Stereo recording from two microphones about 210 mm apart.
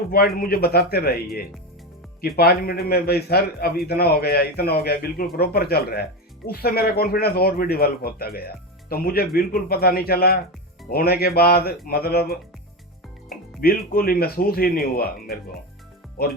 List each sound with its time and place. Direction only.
0.1 s speech: 45° left (ahead or behind)